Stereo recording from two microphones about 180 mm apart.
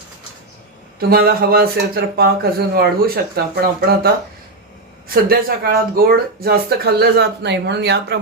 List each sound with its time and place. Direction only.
0.9 s speech: 60° right (ahead or behind)